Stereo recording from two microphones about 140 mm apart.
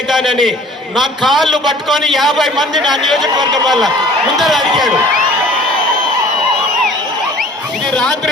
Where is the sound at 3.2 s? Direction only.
30° right (ahead or behind).